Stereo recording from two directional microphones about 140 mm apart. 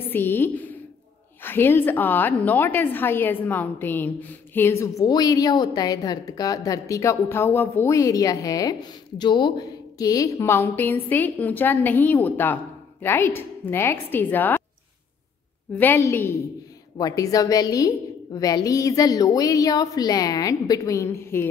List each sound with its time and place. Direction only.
0.1 s a woman's voice: 15° left (ahead or behind)
15.7 s a woman's voice: 15° left (ahead or behind)